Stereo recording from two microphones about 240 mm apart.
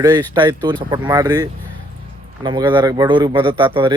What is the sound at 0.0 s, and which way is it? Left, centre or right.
Speech, centre.